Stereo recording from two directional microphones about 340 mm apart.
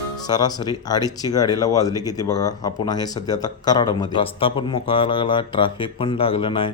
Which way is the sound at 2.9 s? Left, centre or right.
Centre.